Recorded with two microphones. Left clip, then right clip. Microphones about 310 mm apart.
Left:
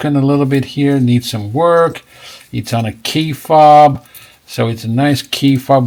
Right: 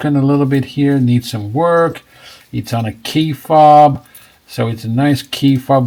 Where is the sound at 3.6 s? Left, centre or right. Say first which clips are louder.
Left 1 dB; left.